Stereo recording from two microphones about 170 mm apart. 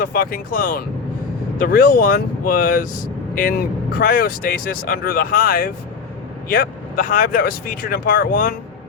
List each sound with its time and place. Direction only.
0.0 s speech: 55° left (ahead or behind)